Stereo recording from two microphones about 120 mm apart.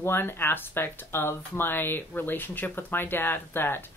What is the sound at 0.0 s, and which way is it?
Speech, 20° left (ahead or behind).